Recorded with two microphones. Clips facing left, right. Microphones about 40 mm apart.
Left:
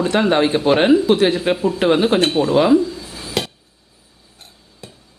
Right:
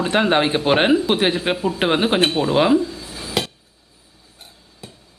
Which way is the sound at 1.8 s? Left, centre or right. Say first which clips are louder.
Left 2 dB; right.